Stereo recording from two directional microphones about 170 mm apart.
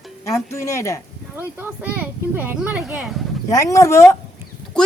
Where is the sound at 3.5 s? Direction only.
20° left (ahead or behind).